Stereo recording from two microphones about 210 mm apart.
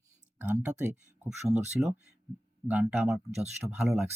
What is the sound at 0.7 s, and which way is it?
Speech, 35° right (ahead or behind).